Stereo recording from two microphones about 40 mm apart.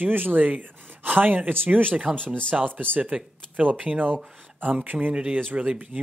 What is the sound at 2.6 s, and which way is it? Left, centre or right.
Speech, right.